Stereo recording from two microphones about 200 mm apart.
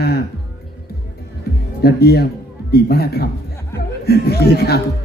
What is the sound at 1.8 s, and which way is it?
A man's voice, 50° left (ahead or behind).